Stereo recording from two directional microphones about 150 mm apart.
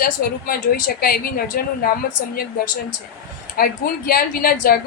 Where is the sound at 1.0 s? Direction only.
80° left.